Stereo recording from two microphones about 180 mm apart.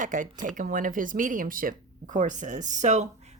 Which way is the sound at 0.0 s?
45° right (ahead or behind).